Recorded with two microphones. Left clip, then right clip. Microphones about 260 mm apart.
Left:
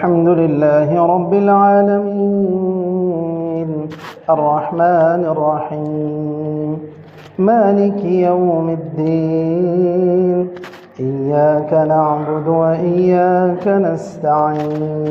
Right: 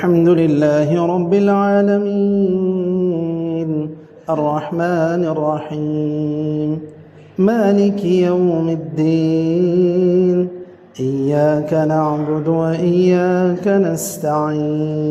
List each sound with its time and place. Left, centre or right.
0.0 s mantra: right
3.2 s mantra: right
7.3 s mantra: right